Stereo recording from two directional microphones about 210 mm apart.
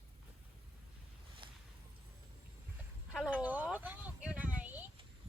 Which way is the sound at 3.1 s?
5° right (ahead or behind).